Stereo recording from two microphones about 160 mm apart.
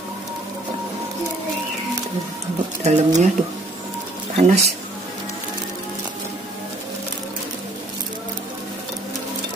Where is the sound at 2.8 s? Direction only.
45° right (ahead or behind).